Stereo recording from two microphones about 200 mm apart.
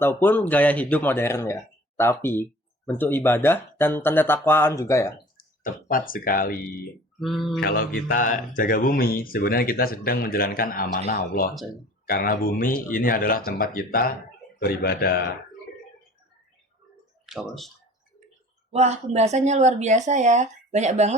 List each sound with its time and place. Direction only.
0.0 s speech: 10° left (ahead or behind)
5.4 s speech: 45° left (ahead or behind)
7.2 s a sound: centre (ahead or behind)
7.6 s speech: 45° left (ahead or behind)
17.2 s speech: centre (ahead or behind)
18.7 s speech: 35° right (ahead or behind)